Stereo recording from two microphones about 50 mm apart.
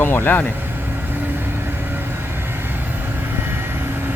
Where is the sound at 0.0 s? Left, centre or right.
Left.